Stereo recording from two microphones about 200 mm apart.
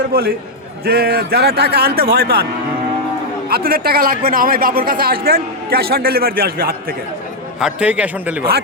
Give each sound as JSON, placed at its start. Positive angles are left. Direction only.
{"t": 0.1, "sound": "a man's voice", "side_deg": -50}
{"t": 3.5, "sound": "a man's voice", "side_deg": -50}
{"t": 7.6, "sound": "a man's voice", "side_deg": -5}